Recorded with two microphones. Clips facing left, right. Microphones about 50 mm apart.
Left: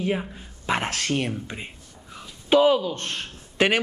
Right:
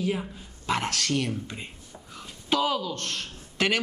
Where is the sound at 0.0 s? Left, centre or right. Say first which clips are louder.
Left 3 dB; left.